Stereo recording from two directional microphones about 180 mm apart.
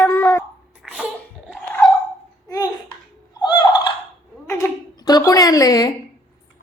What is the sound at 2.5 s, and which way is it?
Babbling, 20° left (ahead or behind).